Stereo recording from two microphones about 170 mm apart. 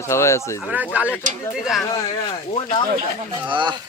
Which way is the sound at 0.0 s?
15° left (ahead or behind).